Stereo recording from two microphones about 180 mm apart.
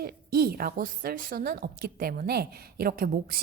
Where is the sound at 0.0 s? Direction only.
60° right (ahead or behind).